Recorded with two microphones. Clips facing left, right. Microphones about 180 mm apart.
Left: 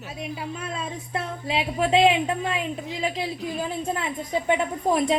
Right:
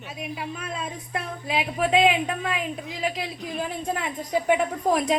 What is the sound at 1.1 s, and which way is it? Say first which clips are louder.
A woman's voice: left 1 dB; 30° left (ahead or behind).